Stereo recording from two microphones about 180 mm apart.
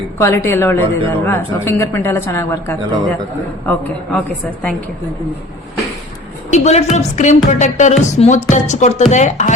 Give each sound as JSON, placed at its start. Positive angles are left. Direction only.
{"t": 0.2, "sound": "speech", "side_deg": 15}
{"t": 6.5, "sound": "speech", "side_deg": 40}